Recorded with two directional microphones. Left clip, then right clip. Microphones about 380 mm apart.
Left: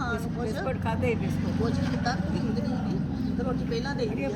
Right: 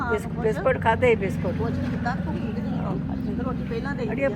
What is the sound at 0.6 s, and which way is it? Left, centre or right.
Speech, centre.